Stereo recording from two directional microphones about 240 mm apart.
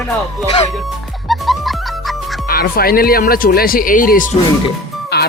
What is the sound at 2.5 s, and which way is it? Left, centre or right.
Speech, left.